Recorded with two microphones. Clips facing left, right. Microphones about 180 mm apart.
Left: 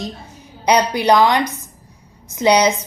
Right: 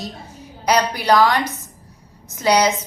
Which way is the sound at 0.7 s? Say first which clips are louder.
Left 3 dB; 20° left (ahead or behind).